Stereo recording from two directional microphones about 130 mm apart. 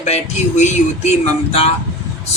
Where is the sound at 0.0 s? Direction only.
65° left (ahead or behind).